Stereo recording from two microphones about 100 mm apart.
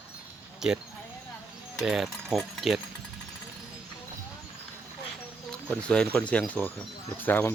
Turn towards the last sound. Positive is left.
turn(degrees=20)  # may be behind; listen again after turning